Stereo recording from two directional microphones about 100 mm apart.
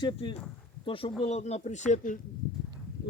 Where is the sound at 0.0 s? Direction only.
50° left (ahead or behind).